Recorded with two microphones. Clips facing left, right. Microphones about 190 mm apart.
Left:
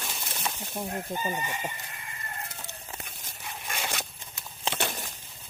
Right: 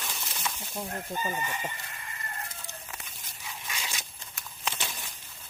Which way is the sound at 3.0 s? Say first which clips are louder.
Left 3 dB; 55° left (ahead or behind).